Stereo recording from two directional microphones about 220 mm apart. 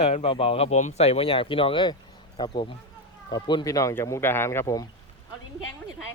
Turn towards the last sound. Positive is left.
turn(degrees=15)  # may be behind; listen again after turning